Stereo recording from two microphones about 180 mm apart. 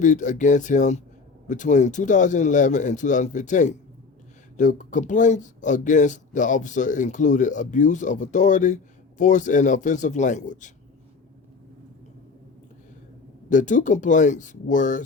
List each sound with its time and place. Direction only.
0.0 s speech: 45° left (ahead or behind)
13.5 s speech: 45° left (ahead or behind)